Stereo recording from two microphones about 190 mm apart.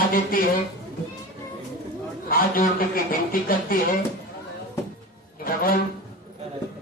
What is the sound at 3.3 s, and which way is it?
Speech, 50° left (ahead or behind).